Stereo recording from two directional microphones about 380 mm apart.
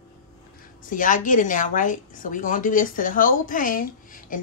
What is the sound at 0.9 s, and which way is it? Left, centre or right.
A woman's voice, left.